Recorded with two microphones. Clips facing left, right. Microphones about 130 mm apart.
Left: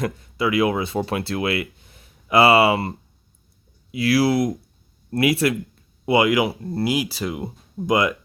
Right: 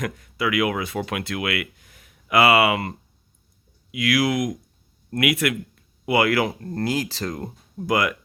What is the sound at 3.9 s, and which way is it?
Speech, 35° left (ahead or behind).